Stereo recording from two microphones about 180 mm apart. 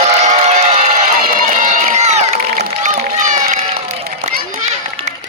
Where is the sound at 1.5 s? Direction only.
45° right (ahead or behind).